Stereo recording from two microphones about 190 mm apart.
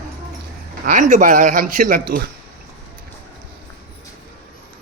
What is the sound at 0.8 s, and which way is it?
Speech, 45° right (ahead or behind).